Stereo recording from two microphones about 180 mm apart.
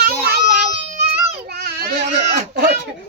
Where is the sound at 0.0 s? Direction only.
60° right (ahead or behind).